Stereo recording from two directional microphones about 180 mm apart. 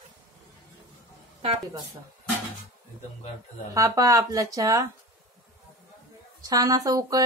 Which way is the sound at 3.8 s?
20° right (ahead or behind).